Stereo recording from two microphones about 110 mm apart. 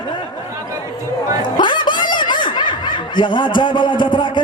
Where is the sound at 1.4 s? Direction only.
45° left (ahead or behind).